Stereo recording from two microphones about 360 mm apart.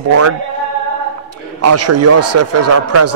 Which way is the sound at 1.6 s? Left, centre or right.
Right.